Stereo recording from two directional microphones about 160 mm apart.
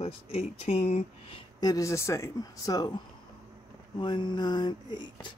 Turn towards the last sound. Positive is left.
turn(degrees=30)  # may be behind; listen again after turning